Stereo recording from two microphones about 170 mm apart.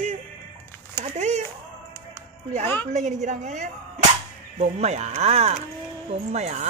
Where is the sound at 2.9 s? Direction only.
45° right (ahead or behind).